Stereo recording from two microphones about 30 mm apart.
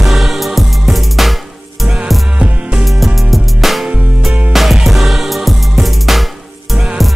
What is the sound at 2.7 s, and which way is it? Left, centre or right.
Music, centre.